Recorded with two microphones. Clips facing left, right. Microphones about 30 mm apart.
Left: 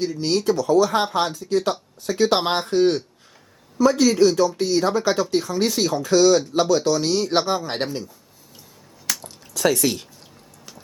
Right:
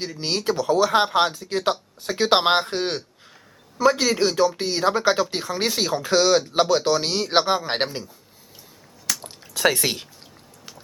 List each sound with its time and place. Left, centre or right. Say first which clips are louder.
0.4 s speech: left 1 dB; right
7.9 s speech: left 3 dB; centre
9.2 s a sound: even; right